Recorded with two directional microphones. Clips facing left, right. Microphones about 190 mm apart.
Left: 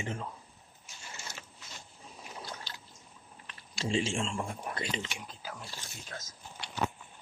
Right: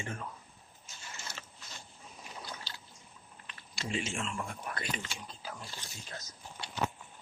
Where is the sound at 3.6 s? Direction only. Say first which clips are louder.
Left 5 dB; 30° left (ahead or behind).